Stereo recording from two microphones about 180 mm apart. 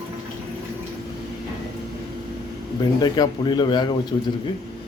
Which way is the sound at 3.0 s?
25° left (ahead or behind).